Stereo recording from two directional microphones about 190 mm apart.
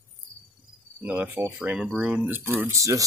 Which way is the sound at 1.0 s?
10° right (ahead or behind).